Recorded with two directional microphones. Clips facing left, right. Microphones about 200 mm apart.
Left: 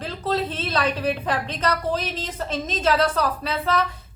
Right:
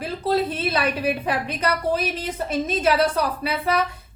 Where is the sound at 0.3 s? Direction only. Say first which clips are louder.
Right 3 dB; 10° right (ahead or behind).